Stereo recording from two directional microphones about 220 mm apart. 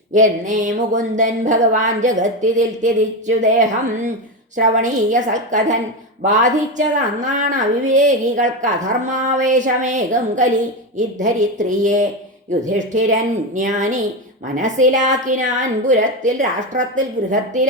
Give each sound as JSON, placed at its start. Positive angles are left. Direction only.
{"t": 0.1, "sound": "a woman's voice", "side_deg": -35}